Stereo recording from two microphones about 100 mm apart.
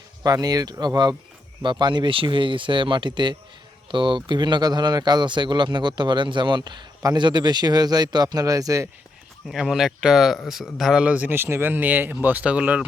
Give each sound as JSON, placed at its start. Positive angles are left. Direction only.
{"t": 0.2, "sound": "speech", "side_deg": -40}
{"t": 9.5, "sound": "speech", "side_deg": -5}